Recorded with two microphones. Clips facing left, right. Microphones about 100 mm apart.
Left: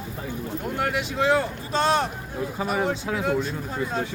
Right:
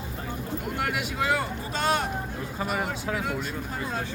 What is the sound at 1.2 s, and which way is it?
Speech, 25° left (ahead or behind).